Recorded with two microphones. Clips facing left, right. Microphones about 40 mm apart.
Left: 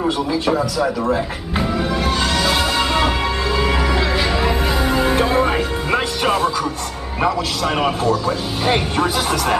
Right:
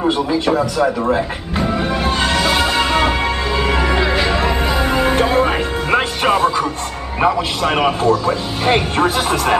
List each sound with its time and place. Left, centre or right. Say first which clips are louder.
0.5 s speech: right 2 dB; centre
1.7 s music: right 2 dB; centre
7.2 s speech: right 3 dB; centre